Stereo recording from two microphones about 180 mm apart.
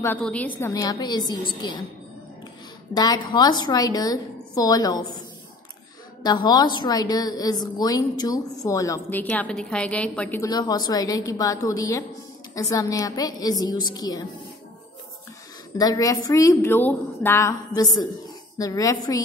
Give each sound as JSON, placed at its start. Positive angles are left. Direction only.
{"t": 0.0, "sound": "a woman's voice", "side_deg": 10}
{"t": 2.9, "sound": "a woman's voice", "side_deg": 20}
{"t": 6.2, "sound": "a woman's voice", "side_deg": 25}
{"t": 10.5, "sound": "a woman's voice", "side_deg": 20}
{"t": 15.8, "sound": "a woman's voice", "side_deg": 20}